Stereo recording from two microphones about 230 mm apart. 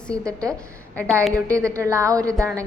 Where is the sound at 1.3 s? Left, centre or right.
Centre.